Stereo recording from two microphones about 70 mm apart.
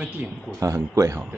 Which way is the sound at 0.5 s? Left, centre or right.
Right.